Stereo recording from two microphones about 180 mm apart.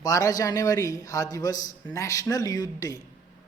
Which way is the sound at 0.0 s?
20° left (ahead or behind).